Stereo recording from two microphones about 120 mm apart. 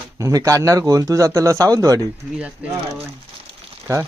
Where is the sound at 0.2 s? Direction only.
25° right (ahead or behind).